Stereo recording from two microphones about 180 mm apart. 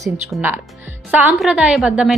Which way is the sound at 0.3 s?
Centre (ahead or behind).